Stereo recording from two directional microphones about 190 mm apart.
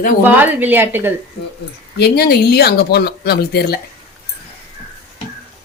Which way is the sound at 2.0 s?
55° left (ahead or behind).